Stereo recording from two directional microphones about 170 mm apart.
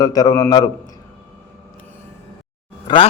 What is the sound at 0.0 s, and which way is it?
Speech, 20° left (ahead or behind).